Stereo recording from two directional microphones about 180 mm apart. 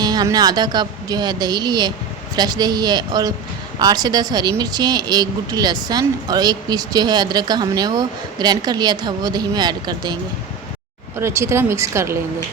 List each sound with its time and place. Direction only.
0.0 s a woman's voice: 20° right (ahead or behind)
11.2 s speech: 15° right (ahead or behind)